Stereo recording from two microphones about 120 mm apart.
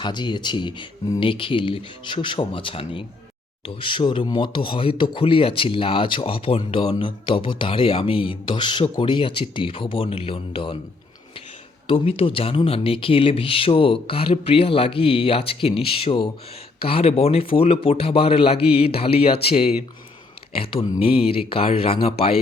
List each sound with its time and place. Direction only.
0.0 s speech: 40° left (ahead or behind)
11.9 s speech: 50° left (ahead or behind)